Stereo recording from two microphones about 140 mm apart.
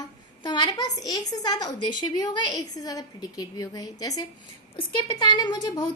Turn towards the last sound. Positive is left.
turn(degrees=30)  # may be behind; listen again after turning